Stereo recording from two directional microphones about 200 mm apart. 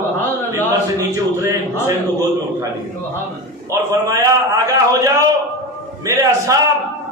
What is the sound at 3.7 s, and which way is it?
A man's voice, 15° right (ahead or behind).